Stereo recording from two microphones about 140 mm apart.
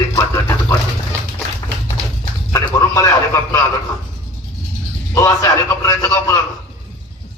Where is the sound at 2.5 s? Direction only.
20° left (ahead or behind).